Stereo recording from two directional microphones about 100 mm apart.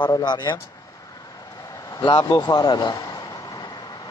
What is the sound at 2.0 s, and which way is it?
Speech, 50° left (ahead or behind).